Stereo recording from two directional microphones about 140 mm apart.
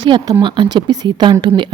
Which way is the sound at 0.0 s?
35° right (ahead or behind).